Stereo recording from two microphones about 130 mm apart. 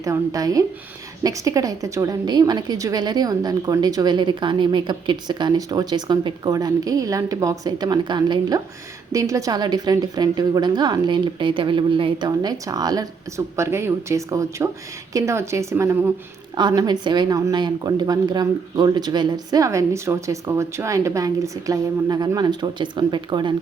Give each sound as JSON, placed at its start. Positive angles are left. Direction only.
{"t": 0.0, "sound": "a woman's voice", "side_deg": -25}
{"t": 16.6, "sound": "a woman's voice", "side_deg": -35}